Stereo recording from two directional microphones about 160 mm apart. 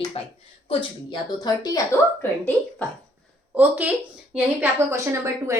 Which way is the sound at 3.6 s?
10° right (ahead or behind).